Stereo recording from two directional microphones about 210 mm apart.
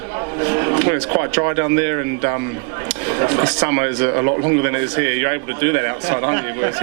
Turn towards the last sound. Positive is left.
turn(degrees=-20)  # may be behind; listen again after turning